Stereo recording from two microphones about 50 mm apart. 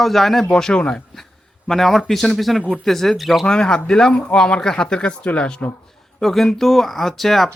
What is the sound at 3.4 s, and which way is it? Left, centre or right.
Speech, centre.